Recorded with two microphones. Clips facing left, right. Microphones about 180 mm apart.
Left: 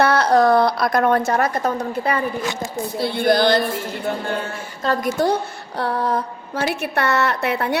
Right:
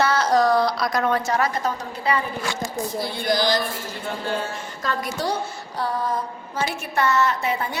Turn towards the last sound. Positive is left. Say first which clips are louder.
# left 4 dB
turn(degrees=65)  # may be behind; listen again after turning